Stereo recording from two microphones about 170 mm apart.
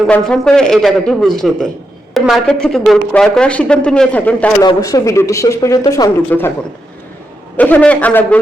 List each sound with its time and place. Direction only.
0.1 s a man's voice: 5° left (ahead or behind)
4.6 s speech: 20° left (ahead or behind)
6.3 s a man's voice: 10° left (ahead or behind)
7.5 s a man's voice: 10° left (ahead or behind)